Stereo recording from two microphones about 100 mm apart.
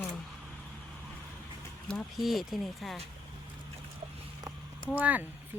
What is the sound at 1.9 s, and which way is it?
Speech, centre (ahead or behind).